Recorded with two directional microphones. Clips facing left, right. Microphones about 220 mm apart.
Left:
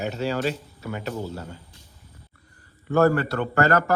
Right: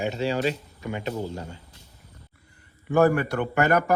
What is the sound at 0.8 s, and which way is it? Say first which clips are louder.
Speech: right 2 dB; 20° right (ahead or behind).